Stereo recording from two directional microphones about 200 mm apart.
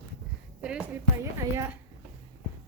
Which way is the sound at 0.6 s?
5° right (ahead or behind).